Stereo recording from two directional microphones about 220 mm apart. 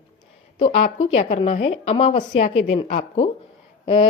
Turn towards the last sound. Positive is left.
turn(degrees=25)  # may be behind; listen again after turning